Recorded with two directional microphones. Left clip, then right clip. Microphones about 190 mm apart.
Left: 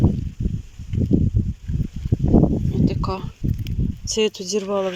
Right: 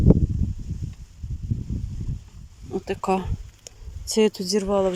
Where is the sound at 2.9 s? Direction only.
15° right (ahead or behind).